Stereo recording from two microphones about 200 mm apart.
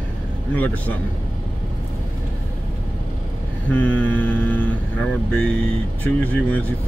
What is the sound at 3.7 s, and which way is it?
Mantra, 10° left (ahead or behind).